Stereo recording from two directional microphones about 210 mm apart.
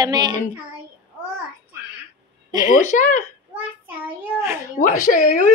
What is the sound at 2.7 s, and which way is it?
Speech, 35° left (ahead or behind).